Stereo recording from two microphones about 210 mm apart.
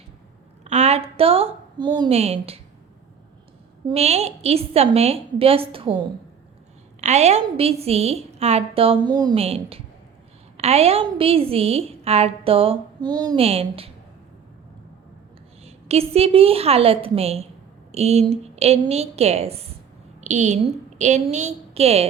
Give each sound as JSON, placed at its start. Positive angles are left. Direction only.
{"t": 0.6, "sound": "a woman's voice", "side_deg": -30}
{"t": 3.8, "sound": "a woman's voice", "side_deg": -30}
{"t": 15.6, "sound": "a woman's voice", "side_deg": -30}